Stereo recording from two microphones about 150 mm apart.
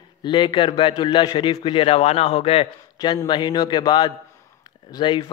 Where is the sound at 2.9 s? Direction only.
30° left (ahead or behind).